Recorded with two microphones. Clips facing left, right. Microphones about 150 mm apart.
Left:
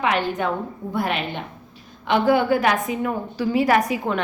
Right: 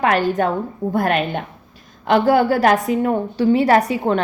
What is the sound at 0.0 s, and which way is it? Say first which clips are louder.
A woman's voice: right 5 dB; 45° right (ahead or behind).